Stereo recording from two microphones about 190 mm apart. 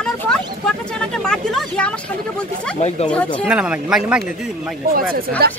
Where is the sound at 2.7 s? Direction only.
35° left (ahead or behind).